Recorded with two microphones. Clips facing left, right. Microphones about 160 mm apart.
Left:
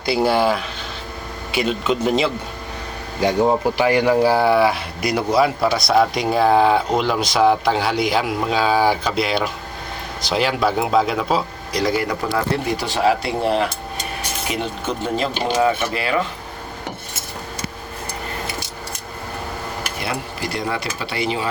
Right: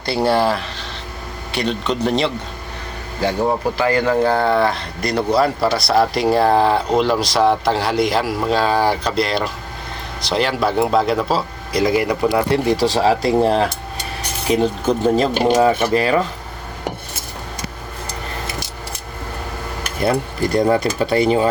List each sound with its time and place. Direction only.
0.0 s speech: centre (ahead or behind)
3.2 s speech: 15° left (ahead or behind); by 12.4 s 10° right (ahead or behind)
12.7 s speech: 35° right (ahead or behind)
20.0 s speech: 50° right (ahead or behind)